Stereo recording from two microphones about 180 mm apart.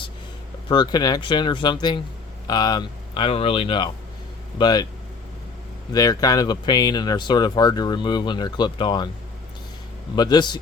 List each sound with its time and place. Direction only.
0.7 s speech: 25° left (ahead or behind)
5.9 s speech: 20° left (ahead or behind)
10.2 s speech: 25° left (ahead or behind)